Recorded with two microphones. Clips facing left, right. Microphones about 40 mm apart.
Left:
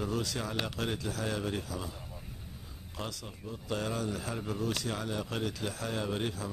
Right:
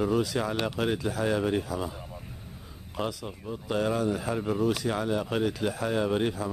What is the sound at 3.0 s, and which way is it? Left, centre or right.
Speech, centre.